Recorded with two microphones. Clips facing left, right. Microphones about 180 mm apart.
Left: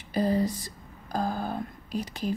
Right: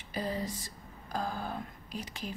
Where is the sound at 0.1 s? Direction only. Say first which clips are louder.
Left 9 dB; 40° left (ahead or behind).